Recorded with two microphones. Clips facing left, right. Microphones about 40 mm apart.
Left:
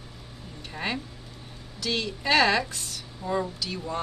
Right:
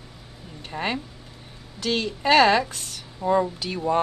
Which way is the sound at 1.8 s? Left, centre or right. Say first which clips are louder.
Right 4 dB; right.